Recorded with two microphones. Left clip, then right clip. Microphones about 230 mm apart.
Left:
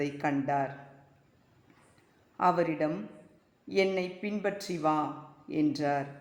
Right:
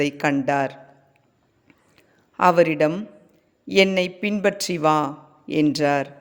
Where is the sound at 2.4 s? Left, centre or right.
Right.